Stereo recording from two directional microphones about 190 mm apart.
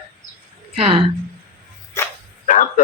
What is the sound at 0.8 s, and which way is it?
Speech, 30° right (ahead or behind).